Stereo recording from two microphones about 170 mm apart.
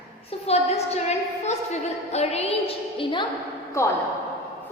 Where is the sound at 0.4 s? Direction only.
40° left (ahead or behind).